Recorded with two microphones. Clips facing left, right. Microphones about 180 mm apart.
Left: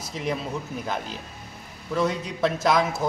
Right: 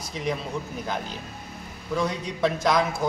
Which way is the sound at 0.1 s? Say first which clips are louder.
Even; centre (ahead or behind).